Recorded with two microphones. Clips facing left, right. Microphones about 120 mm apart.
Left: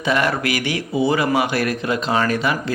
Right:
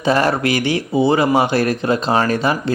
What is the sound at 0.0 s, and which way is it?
Speech, 35° right (ahead or behind).